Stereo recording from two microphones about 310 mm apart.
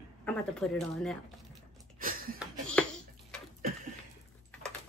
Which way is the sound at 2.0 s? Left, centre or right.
Right.